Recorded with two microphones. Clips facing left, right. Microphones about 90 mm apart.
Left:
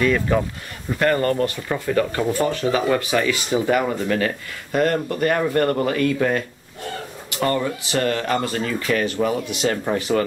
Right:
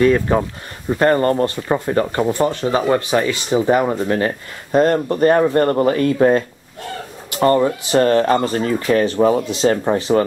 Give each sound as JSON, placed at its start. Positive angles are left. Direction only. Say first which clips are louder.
{"t": 0.0, "sound": "speech", "louder": "right 5 dB", "side_deg": -30}